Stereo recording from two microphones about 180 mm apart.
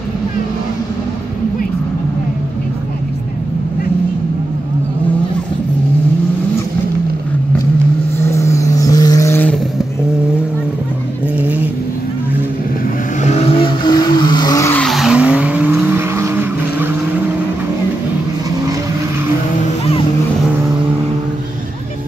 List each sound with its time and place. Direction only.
8.3 s vehicle: 15° left (ahead or behind)
13.2 s vehicle: 35° left (ahead or behind); by 14.8 s 20° left (ahead or behind)
14.8 s vehicle: centre (ahead or behind)